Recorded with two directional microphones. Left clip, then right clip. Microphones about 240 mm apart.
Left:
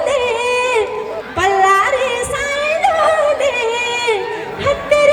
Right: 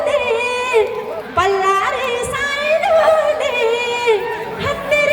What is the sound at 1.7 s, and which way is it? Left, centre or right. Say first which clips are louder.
Music: left 3 dB; centre.